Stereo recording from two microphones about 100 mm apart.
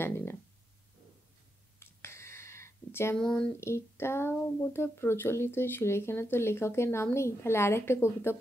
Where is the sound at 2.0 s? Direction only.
25° left (ahead or behind).